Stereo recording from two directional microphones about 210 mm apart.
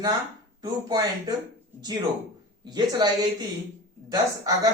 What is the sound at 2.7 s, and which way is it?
Speech, 20° right (ahead or behind).